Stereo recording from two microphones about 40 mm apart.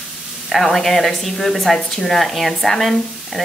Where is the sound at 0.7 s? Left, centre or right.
Centre.